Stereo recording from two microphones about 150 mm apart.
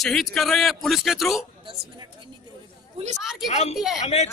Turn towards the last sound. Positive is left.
turn(degrees=45)  # may be behind; listen again after turning